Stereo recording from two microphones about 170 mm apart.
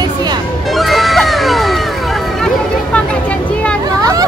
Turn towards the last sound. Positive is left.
turn(degrees=-20)  # may be behind; listen again after turning